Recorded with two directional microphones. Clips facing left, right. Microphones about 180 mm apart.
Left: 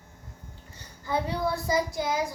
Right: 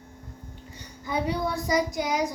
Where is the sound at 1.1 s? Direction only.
15° right (ahead or behind).